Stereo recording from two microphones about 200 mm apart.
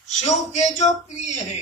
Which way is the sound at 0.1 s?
35° left (ahead or behind).